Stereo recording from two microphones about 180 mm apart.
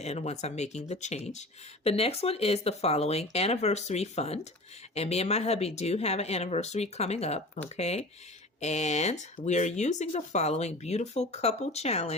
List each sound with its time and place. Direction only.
0.0 s speech: 35° left (ahead or behind)